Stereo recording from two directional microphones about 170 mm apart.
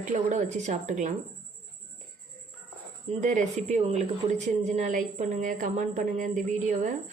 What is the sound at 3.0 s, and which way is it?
Speech, 45° right (ahead or behind).